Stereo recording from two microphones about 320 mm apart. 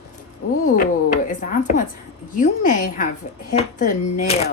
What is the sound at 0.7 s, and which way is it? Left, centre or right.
A woman's voice, left.